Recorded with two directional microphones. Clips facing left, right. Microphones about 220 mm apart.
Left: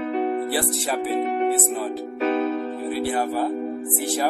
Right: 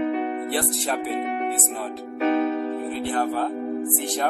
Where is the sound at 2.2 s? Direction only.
35° left (ahead or behind).